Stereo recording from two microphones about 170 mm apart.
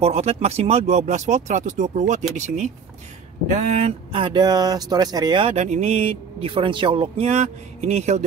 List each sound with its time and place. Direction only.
0.0 s speech: 35° right (ahead or behind)